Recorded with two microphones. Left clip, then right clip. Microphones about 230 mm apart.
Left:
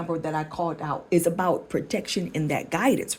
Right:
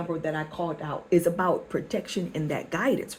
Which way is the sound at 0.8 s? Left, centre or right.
Left.